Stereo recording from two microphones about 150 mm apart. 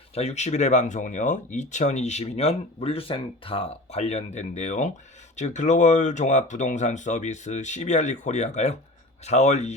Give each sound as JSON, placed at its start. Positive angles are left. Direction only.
{"t": 0.1, "sound": "speech", "side_deg": 45}